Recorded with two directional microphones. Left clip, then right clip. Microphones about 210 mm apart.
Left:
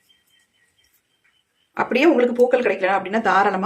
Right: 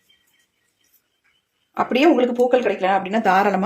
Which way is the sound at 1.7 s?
15° right (ahead or behind).